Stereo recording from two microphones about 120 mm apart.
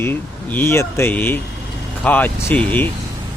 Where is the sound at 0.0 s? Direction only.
20° left (ahead or behind).